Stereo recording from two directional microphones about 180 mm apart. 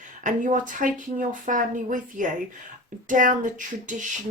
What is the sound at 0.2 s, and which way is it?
Speech, 45° right (ahead or behind).